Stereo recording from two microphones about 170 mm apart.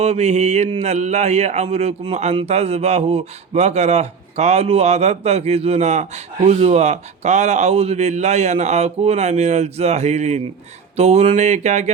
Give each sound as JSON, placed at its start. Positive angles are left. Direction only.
{"t": 0.0, "sound": "speech", "side_deg": -40}